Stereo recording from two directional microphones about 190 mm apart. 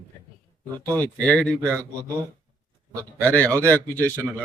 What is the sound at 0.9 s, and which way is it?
Speech, 5° left (ahead or behind).